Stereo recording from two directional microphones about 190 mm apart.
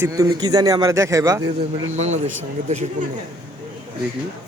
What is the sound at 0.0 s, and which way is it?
A man's voice, 15° right (ahead or behind).